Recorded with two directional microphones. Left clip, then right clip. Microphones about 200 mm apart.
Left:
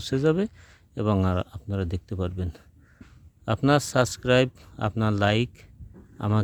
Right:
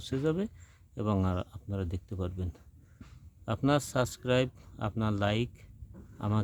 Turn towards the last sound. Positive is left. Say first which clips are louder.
# left 6 dB
turn(degrees=30)  # may be behind; listen again after turning